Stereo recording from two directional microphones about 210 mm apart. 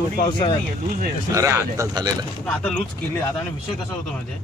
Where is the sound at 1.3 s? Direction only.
15° right (ahead or behind).